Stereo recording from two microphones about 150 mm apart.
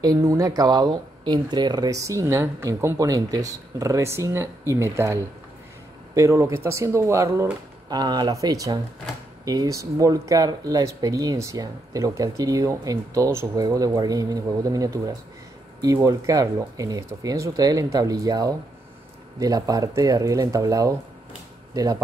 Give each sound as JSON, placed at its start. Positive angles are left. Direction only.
{"t": 0.0, "sound": "speech", "side_deg": -25}